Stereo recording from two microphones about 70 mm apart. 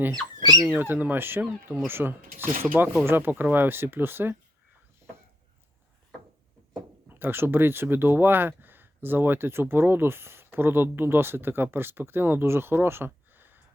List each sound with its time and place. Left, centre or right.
0.6 s speech: right
7.1 s speech: right